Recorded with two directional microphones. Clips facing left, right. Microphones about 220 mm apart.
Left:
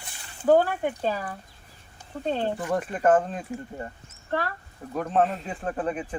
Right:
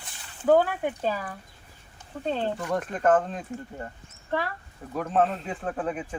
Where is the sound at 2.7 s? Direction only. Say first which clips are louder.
Left 1 dB; 5° left (ahead or behind).